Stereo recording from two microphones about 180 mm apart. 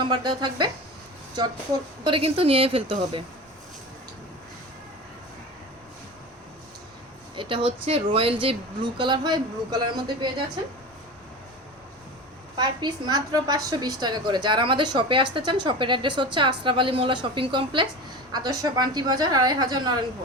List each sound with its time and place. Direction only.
0.0 s a woman's voice: 25° right (ahead or behind)
2.0 s a woman's voice: 30° right (ahead or behind)
7.3 s a woman's voice: 30° right (ahead or behind)
12.5 s a woman's voice: 25° right (ahead or behind)